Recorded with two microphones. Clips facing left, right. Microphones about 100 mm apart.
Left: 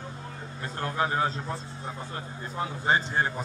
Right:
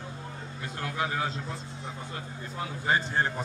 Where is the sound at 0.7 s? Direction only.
40° left (ahead or behind).